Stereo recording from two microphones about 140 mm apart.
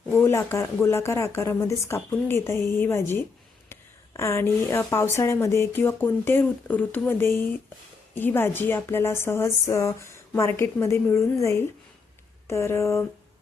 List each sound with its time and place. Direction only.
0.1 s a woman's voice: 15° left (ahead or behind)